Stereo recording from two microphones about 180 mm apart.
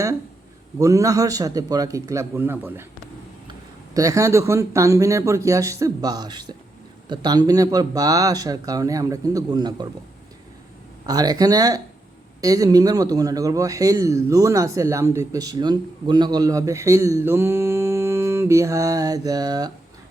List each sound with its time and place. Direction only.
0.8 s speech: 20° right (ahead or behind)
3.9 s speech: 20° right (ahead or behind)
11.0 s speech: 20° right (ahead or behind)